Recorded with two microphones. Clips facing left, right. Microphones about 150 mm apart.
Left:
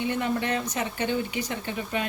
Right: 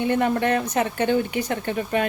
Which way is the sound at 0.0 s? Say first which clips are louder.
Right 6 dB; 55° right (ahead or behind).